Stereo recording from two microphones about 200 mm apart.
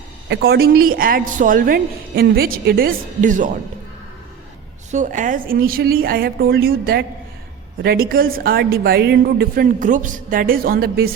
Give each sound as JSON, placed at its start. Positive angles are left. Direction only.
{"t": 0.3, "sound": "a woman's voice", "side_deg": -55}
{"t": 4.9, "sound": "a woman's voice", "side_deg": -40}